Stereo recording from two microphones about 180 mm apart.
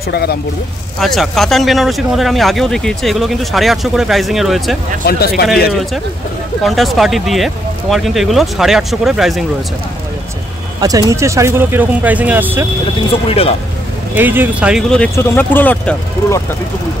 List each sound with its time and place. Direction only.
0.1 s speech: 60° left (ahead or behind)
0.9 s speech: centre (ahead or behind)
5.0 s speech: 60° left (ahead or behind)
6.6 s speech: centre (ahead or behind)
10.8 s speech: 20° right (ahead or behind)
13.3 s speech: 35° left (ahead or behind)
14.1 s speech: 10° right (ahead or behind); by 16.0 s 5° left (ahead or behind)